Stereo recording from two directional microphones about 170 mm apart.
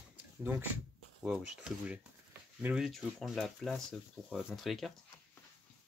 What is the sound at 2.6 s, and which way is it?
Speech, 5° right (ahead or behind).